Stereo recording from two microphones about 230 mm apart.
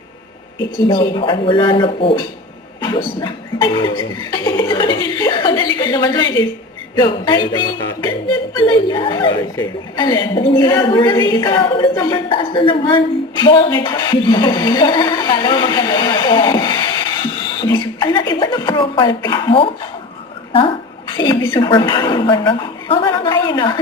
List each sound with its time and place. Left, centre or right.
0.9 s speech: left